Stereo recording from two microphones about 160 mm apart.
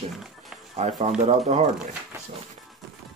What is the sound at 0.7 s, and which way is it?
Speech, 45° right (ahead or behind).